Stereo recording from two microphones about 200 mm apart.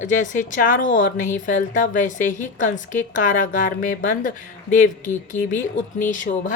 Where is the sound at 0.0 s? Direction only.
40° left (ahead or behind).